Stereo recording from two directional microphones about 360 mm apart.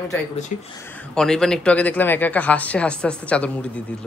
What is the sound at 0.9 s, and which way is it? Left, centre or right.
Speech, centre.